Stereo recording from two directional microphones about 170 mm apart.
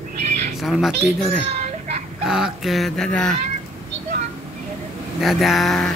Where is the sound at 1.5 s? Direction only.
40° right (ahead or behind).